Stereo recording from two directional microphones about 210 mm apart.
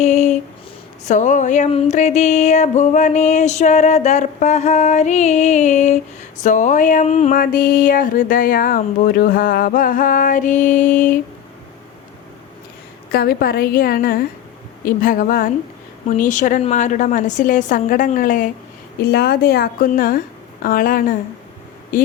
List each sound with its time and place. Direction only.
0.0 s a sound: 35° left (ahead or behind)
1.0 s music: 35° left (ahead or behind)
13.1 s a woman's voice: 45° left (ahead or behind)
14.8 s music: 40° left (ahead or behind)
19.0 s a woman's voice: 50° left (ahead or behind)
21.9 s music: 40° left (ahead or behind)